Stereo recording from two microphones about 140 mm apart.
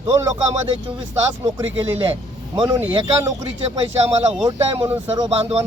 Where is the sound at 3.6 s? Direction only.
40° right (ahead or behind).